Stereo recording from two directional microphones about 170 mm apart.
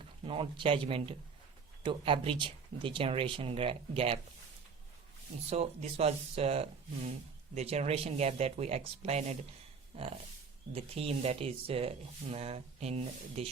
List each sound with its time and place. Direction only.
0.0 s speech: 30° right (ahead or behind)
5.5 s speech: 40° right (ahead or behind)